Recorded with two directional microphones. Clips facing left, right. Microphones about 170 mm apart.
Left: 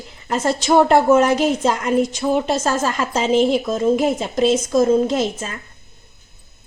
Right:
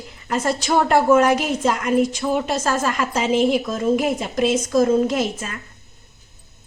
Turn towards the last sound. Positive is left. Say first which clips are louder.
# left 2 dB
turn(degrees=30)  # may be behind; listen again after turning